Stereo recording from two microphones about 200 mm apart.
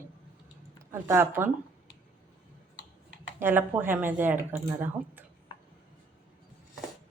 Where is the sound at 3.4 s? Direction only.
10° right (ahead or behind).